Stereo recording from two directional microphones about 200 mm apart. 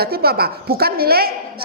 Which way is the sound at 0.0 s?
50° right (ahead or behind).